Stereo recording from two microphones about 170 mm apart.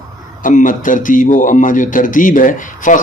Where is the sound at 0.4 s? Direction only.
50° left (ahead or behind).